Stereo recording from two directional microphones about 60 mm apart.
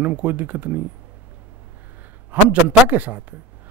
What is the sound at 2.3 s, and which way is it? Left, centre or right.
A man's voice, right.